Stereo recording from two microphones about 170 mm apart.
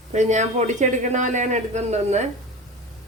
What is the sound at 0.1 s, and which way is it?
Speech, 45° right (ahead or behind).